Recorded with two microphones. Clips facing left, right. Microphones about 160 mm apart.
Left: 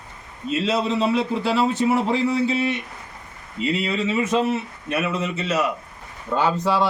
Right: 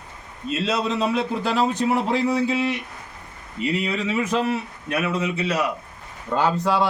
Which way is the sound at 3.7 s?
10° right (ahead or behind).